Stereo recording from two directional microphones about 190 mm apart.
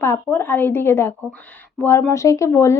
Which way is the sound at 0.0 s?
10° left (ahead or behind).